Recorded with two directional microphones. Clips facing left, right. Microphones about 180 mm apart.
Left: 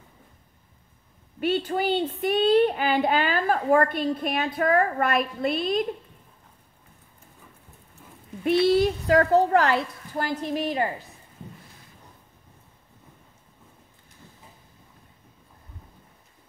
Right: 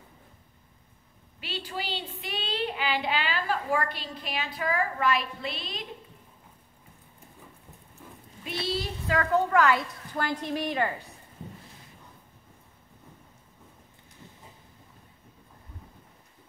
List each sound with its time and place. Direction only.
1.4 s speech: 50° left (ahead or behind)
8.5 s speech: 55° left (ahead or behind); by 9.8 s 35° left (ahead or behind)
10.4 s a woman's voice: 25° left (ahead or behind)